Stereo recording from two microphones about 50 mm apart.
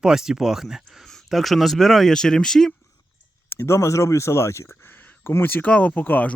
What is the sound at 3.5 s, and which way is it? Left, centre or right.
Speech, left.